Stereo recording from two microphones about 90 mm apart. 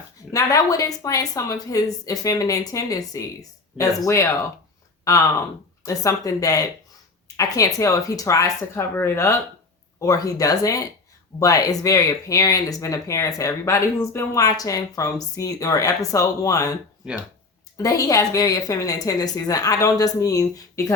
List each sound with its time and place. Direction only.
0.3 s a woman's voice: 40° left (ahead or behind)
14.3 s a woman's voice: 40° left (ahead or behind)
17.7 s a woman's voice: 40° left (ahead or behind)